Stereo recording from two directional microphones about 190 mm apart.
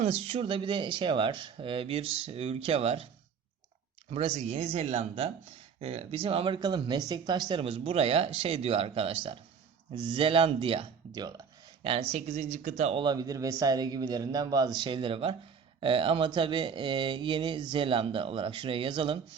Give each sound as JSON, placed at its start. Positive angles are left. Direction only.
{"t": 0.0, "sound": "speech", "side_deg": -35}
{"t": 4.1, "sound": "speech", "side_deg": -35}